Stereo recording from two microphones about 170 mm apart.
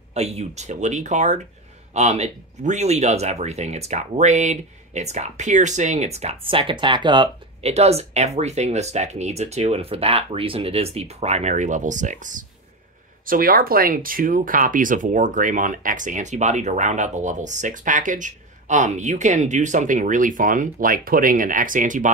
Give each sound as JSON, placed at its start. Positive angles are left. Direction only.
{"t": 0.1, "sound": "speech", "side_deg": -40}
{"t": 7.7, "sound": "speech", "side_deg": -40}